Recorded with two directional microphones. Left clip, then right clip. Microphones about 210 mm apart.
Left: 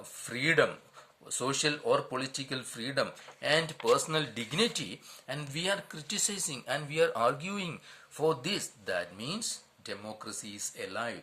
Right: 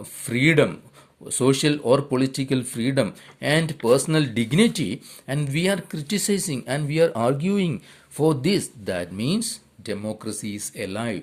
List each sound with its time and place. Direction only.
0.3 s speech: 35° right (ahead or behind)